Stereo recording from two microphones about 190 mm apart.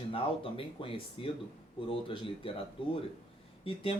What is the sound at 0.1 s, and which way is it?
A man's voice, 30° left (ahead or behind).